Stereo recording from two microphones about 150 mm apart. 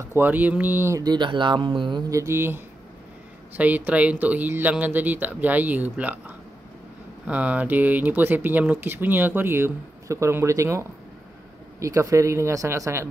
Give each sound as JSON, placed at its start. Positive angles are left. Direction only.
{"t": 0.0, "sound": "speech", "side_deg": -15}
{"t": 1.0, "sound": "speech", "side_deg": -30}